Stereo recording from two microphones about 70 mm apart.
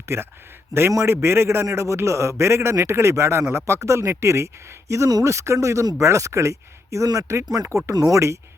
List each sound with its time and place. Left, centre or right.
0.0 s a man's voice: right